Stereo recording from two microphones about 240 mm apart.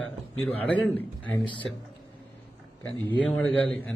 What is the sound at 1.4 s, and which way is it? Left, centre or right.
Speech, left.